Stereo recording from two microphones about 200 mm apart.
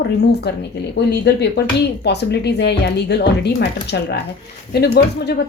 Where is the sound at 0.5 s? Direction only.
55° left (ahead or behind).